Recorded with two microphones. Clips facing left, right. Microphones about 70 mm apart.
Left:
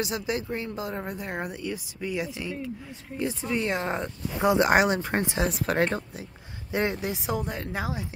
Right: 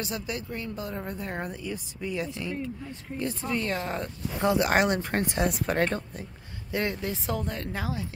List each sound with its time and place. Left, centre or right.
0.0 s speech: centre
4.4 s speech: centre
6.7 s speech: left